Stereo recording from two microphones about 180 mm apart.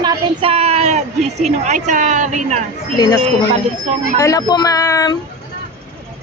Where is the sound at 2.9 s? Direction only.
20° left (ahead or behind).